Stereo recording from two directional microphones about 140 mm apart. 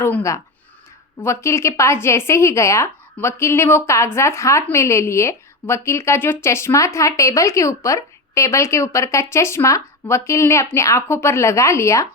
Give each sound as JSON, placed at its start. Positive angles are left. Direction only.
{"t": 0.0, "sound": "a woman's voice", "side_deg": 20}